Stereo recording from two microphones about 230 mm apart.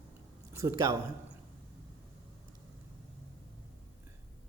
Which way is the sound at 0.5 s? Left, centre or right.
Centre.